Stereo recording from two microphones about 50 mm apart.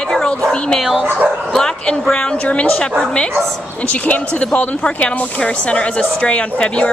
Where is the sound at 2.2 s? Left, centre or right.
Left.